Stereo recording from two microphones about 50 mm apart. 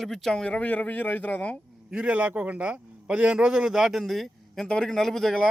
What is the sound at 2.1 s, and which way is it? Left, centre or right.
A man's voice, right.